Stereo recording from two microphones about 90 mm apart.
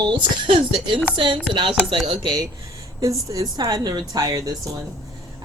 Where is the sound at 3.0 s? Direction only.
40° right (ahead or behind).